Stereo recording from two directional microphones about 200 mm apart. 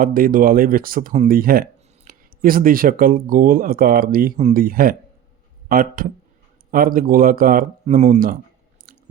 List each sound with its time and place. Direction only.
0.0 s speech: 45° right (ahead or behind)
8.9 s chewing: 45° right (ahead or behind)